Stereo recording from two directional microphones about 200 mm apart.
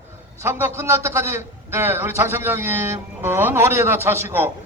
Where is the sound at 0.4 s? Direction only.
10° right (ahead or behind).